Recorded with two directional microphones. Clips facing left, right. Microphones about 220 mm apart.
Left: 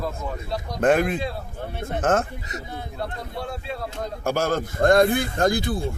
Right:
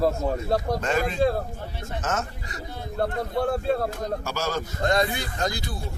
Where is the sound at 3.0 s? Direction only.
50° right (ahead or behind).